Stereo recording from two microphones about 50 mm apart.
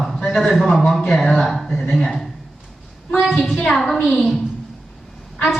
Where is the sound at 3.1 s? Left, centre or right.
Centre.